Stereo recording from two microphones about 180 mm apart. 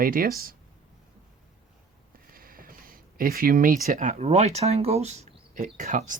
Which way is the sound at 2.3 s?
55° right (ahead or behind).